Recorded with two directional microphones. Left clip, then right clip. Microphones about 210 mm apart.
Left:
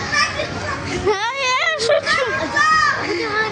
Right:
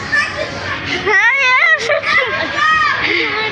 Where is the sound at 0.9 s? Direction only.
20° left (ahead or behind).